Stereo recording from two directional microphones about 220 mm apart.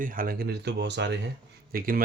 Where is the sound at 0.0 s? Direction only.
40° right (ahead or behind).